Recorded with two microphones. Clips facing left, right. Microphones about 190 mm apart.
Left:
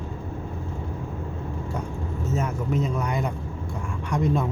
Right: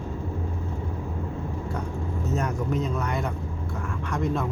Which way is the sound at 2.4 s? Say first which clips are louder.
Left 2 dB; 5° left (ahead or behind).